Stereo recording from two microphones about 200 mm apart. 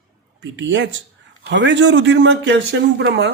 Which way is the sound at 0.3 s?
65° right (ahead or behind).